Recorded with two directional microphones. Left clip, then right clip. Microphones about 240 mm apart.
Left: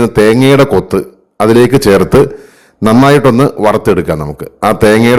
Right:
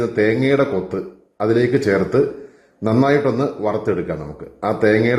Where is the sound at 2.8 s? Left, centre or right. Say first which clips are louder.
Left 10 dB; left.